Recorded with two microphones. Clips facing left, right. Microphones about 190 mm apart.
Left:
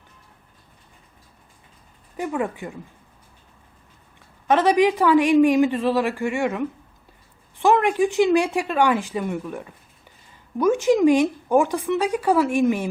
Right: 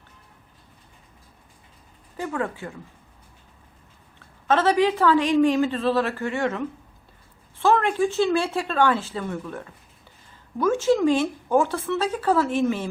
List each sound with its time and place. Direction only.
2.1 s a woman's voice: 15° left (ahead or behind)
4.4 s a woman's voice: 15° left (ahead or behind)